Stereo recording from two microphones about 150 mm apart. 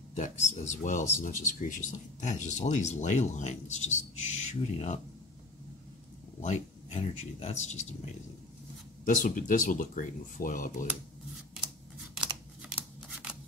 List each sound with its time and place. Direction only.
0.1 s speech: 50° left (ahead or behind)
6.4 s speech: 50° left (ahead or behind)
12.6 s scissors: 10° right (ahead or behind)